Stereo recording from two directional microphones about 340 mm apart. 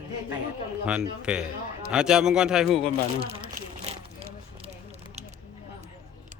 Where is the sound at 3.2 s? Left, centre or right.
Centre.